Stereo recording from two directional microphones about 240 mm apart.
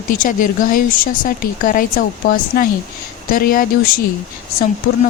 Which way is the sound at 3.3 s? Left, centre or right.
Left.